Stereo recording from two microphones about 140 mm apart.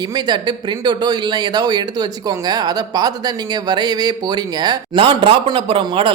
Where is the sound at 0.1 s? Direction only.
30° right (ahead or behind).